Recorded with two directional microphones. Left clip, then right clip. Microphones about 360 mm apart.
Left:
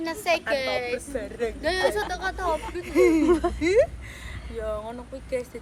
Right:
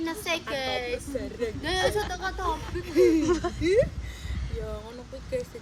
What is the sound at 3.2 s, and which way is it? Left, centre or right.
Speech, centre.